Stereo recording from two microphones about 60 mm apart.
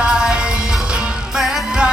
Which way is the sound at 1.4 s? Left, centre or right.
Centre.